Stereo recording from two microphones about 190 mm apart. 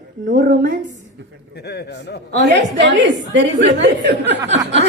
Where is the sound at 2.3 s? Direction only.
65° right (ahead or behind).